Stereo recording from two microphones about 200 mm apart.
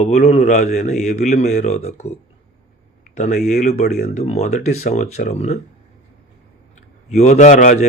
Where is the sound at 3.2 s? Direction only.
35° left (ahead or behind).